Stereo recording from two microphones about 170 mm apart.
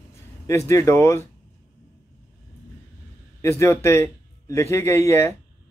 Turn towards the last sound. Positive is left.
turn(degrees=15)  # may be behind; listen again after turning